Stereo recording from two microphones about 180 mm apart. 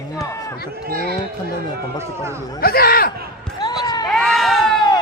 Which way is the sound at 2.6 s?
55° left (ahead or behind).